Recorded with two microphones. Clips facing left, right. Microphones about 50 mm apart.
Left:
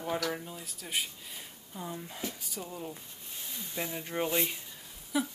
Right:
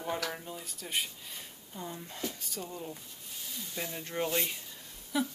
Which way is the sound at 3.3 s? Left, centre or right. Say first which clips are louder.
Even; left.